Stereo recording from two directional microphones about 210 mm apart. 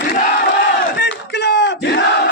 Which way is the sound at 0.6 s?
55° left (ahead or behind).